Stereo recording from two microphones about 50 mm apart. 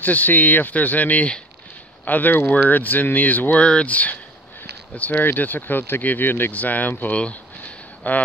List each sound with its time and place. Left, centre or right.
0.0 s speech: left
3.6 s speech: left
5.2 s speech: left
7.2 s a sound: left